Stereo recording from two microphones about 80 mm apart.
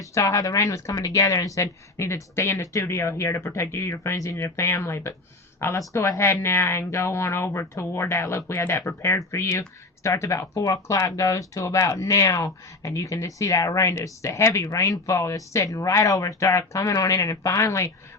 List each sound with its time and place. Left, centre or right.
0.0 s speech: left